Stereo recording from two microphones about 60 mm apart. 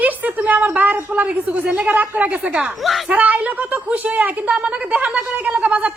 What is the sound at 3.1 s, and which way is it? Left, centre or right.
A woman's voice, right.